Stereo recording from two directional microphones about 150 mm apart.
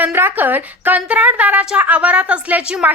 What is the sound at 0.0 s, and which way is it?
A woman's voice, 15° right (ahead or behind).